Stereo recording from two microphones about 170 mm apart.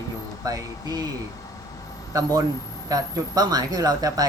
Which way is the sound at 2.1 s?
20° right (ahead or behind).